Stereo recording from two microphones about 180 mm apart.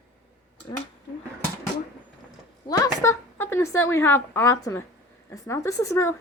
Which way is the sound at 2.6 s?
20° left (ahead or behind).